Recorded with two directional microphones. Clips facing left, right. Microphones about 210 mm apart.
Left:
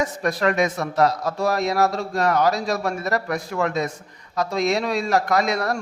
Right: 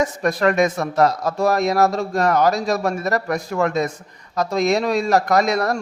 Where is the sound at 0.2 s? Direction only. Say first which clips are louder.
Right 3 dB; 50° right (ahead or behind).